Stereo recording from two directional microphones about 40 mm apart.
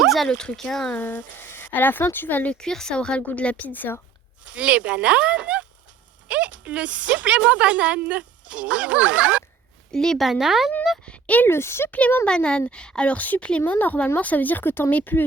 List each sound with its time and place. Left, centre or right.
0.0 s a sound: centre
0.3 s speech: centre
0.9 s speech: left
2.6 s speech: centre
3.2 s speech: left
4.5 s speech: right
9.9 s speech: centre
10.2 s speech: centre
11.0 s a sound: left
11.4 s speech: left
11.9 s speech: left
12.2 s speech: left
13.1 s speech: left